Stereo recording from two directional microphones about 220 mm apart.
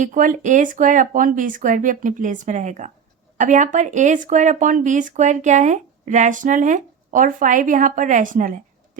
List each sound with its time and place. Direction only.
0.0 s speech: 35° right (ahead or behind)